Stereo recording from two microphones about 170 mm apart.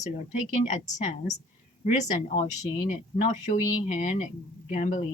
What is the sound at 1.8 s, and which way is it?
Speech, 45° left (ahead or behind).